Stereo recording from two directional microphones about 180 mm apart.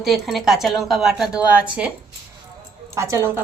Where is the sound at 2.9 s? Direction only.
15° right (ahead or behind).